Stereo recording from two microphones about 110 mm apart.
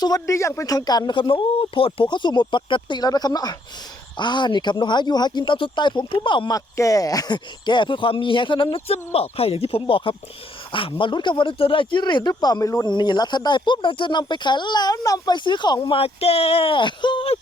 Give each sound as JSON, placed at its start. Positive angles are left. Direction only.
{"t": 0.0, "sound": "speech", "side_deg": 30}
{"t": 6.5, "sound": "speech", "side_deg": 30}
{"t": 12.9, "sound": "speech", "side_deg": 40}
{"t": 15.4, "sound": "speech", "side_deg": 45}